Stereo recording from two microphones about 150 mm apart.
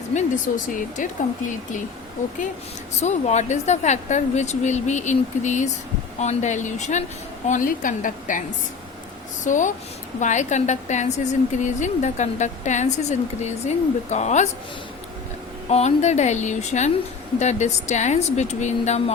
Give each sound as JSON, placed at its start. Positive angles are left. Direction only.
{"t": 0.1, "sound": "a woman's voice", "side_deg": 55}
{"t": 3.0, "sound": "a woman's voice", "side_deg": 50}
{"t": 15.7, "sound": "a woman's voice", "side_deg": 50}